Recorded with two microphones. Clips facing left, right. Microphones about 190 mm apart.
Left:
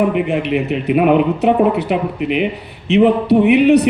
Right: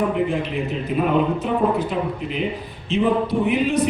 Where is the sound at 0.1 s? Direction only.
70° left (ahead or behind).